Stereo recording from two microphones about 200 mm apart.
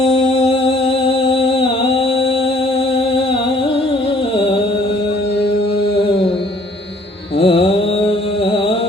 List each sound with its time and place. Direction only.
0.0 s music: 30° left (ahead or behind)
4.4 s music: 25° left (ahead or behind)
7.3 s music: 25° left (ahead or behind)